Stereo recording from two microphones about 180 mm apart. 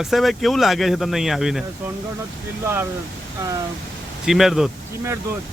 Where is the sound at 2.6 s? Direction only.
10° right (ahead or behind).